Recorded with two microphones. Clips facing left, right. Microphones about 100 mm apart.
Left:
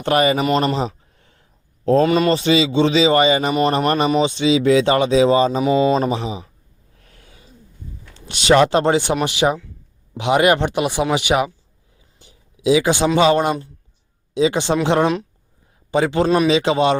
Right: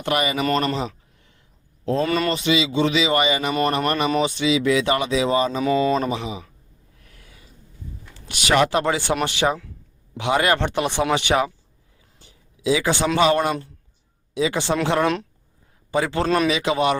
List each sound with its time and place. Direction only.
0.0 s a man's voice: 35° left (ahead or behind)
0.6 s a sound: 30° left (ahead or behind)
1.8 s speech: 40° left (ahead or behind)
2.0 s a man's voice: 25° left (ahead or behind)
4.1 s speech: 25° left (ahead or behind)
7.0 s snort: 30° left (ahead or behind)
8.3 s speech: 25° left (ahead or behind)
12.2 s a sound: 20° left (ahead or behind)
13.1 s speech: 20° left (ahead or behind)